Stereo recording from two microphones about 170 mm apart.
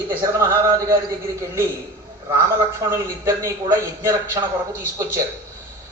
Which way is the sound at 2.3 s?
20° right (ahead or behind).